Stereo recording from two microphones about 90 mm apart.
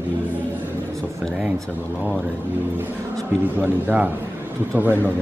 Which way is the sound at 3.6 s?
20° right (ahead or behind).